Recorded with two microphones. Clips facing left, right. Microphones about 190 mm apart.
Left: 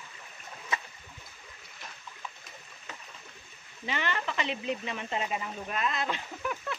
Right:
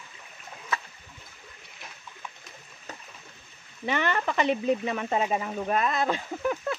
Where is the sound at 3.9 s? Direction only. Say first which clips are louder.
Right 6 dB; 50° right (ahead or behind).